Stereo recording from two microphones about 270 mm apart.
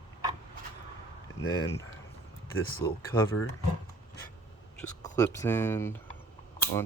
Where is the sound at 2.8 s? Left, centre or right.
Centre.